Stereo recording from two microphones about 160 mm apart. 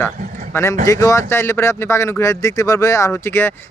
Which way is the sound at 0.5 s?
20° left (ahead or behind).